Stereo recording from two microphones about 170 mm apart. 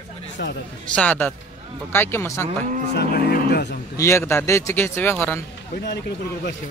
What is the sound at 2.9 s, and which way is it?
Cattle, 70° left (ahead or behind).